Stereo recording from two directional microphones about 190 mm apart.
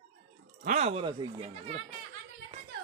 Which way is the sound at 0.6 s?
35° right (ahead or behind).